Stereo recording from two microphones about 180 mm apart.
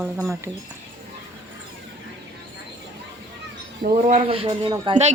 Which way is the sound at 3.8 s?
50° right (ahead or behind).